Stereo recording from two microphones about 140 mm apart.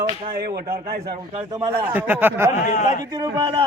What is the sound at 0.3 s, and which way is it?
Speech, 90° right.